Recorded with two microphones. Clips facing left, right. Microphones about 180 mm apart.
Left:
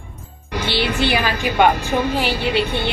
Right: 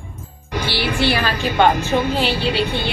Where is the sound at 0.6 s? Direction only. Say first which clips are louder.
Even; 20° left (ahead or behind).